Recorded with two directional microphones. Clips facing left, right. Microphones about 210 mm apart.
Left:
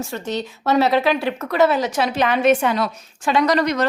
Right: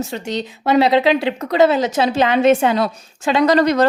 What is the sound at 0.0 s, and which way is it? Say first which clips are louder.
Speech: right 2 dB; 20° right (ahead or behind).